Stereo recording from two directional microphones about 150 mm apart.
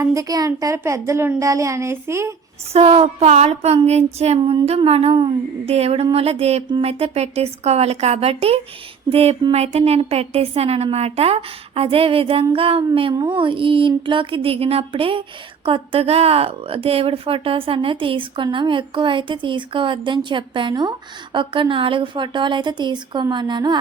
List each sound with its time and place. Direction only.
0.0 s a child's voice: 20° right (ahead or behind)
2.7 s a woman's voice: 40° right (ahead or behind)